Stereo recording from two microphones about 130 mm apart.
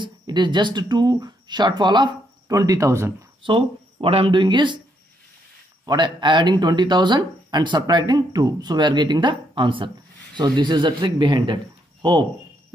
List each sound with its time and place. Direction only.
0.0 s speech: 35° right (ahead or behind)
3.4 s speech: 45° right (ahead or behind)
5.9 s speech: 35° right (ahead or behind)